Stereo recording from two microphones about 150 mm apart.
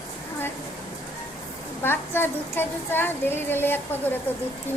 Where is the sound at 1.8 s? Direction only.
15° left (ahead or behind).